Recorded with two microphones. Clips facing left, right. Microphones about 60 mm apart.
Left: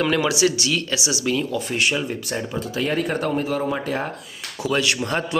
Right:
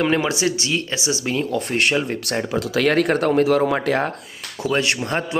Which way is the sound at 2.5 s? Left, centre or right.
Right.